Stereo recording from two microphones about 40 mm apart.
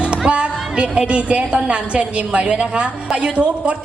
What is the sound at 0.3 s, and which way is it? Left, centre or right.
A woman's voice, right.